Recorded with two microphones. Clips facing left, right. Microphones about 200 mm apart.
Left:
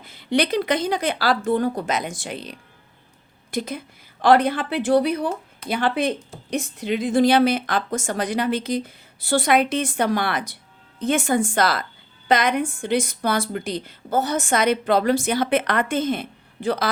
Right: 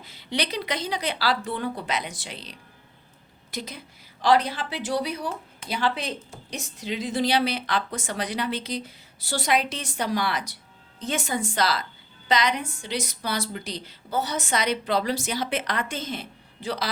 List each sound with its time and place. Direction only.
0.0 s a woman's voice: 50° left (ahead or behind)